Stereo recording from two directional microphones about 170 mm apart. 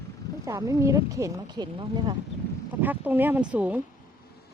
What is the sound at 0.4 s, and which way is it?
Speech, 20° right (ahead or behind).